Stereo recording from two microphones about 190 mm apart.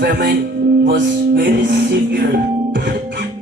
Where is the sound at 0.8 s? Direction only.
65° right (ahead or behind).